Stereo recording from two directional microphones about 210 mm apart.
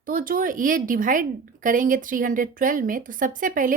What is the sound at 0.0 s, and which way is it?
A woman's voice, 40° right (ahead or behind).